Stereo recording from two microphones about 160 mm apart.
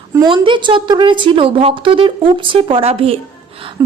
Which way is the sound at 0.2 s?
30° right (ahead or behind).